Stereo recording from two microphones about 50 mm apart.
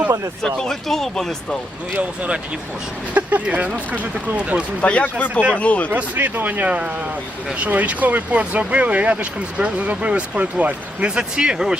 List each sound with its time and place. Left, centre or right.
0.4 s speech: centre
2.0 s speech: right
4.4 s speech: right
4.8 s speech: left
5.9 s speech: right
11.0 s speech: centre